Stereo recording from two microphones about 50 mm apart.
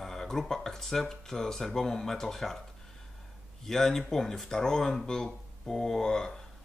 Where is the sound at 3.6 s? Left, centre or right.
Centre.